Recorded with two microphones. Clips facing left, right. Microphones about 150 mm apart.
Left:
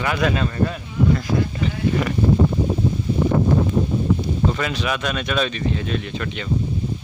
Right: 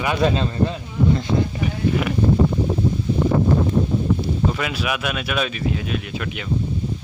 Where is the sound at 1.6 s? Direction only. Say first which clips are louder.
Even; 5° right (ahead or behind).